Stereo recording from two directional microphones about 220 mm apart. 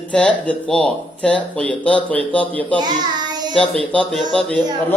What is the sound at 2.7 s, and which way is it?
Child singing, 20° right (ahead or behind).